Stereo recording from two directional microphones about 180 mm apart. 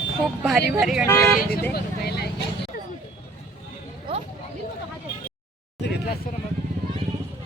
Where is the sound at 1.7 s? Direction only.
65° left (ahead or behind).